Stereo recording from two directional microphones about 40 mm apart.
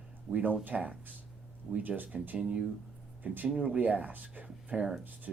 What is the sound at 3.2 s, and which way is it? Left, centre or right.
Speech, right.